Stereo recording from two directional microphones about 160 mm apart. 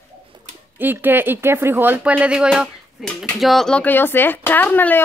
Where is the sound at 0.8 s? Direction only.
10° right (ahead or behind).